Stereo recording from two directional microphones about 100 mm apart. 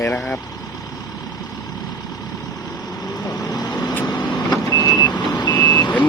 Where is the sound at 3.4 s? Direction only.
45° left (ahead or behind).